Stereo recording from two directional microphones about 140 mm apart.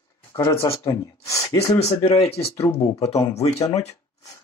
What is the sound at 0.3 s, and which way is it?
Speech, 20° left (ahead or behind).